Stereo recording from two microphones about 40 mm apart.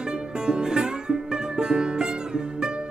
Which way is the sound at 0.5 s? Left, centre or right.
Centre.